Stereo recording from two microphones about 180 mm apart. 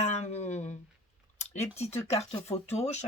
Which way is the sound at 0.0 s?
40° left (ahead or behind).